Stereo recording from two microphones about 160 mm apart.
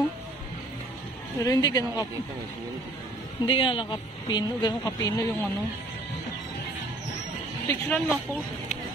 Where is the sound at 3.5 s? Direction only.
30° left (ahead or behind).